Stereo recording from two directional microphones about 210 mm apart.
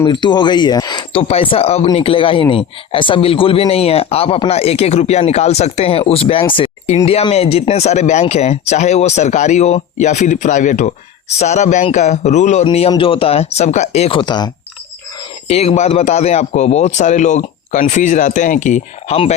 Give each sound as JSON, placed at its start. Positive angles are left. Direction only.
{"t": 0.0, "sound": "speech", "side_deg": 20}